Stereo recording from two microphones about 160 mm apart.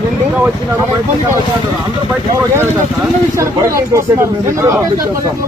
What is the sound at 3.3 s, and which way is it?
Speech, 20° right (ahead or behind).